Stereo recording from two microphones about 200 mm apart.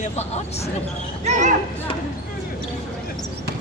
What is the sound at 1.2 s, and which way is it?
Speech, 35° right (ahead or behind).